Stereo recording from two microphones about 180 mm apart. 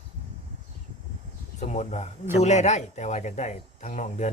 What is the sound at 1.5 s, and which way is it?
Speech, 40° left (ahead or behind).